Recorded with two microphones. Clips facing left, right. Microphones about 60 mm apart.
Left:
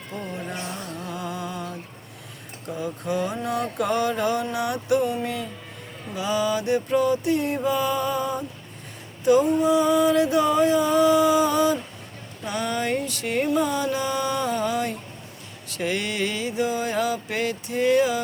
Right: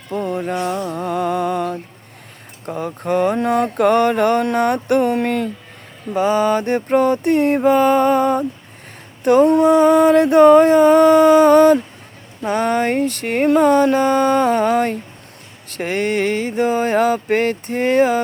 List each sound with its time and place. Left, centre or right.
0.1 s music: right
0.9 s music: right
2.6 s mantra: right
6.1 s mantra: right
12.4 s mantra: right